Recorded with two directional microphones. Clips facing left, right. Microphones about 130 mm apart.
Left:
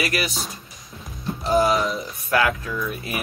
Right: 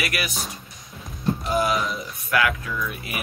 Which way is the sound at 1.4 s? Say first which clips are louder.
Left 6 dB; 30° left (ahead or behind).